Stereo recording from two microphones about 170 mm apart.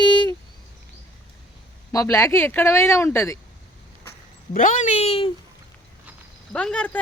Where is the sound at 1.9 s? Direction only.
20° left (ahead or behind).